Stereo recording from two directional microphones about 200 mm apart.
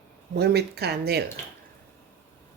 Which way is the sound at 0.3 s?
55° right (ahead or behind).